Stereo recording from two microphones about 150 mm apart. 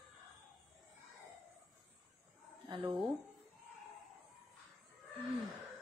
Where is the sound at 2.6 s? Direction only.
35° right (ahead or behind).